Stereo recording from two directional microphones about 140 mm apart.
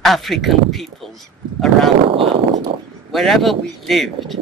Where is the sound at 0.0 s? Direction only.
Centre (ahead or behind).